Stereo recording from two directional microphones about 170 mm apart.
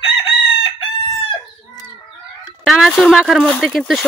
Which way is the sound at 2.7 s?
Centre (ahead or behind).